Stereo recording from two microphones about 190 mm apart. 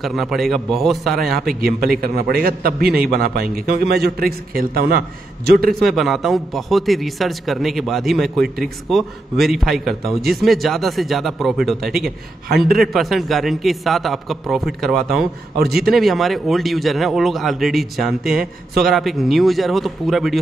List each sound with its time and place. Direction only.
0.0 s a man's voice: centre (ahead or behind)
1.5 s a man's voice: 50° right (ahead or behind)
5.7 s a man's voice: centre (ahead or behind)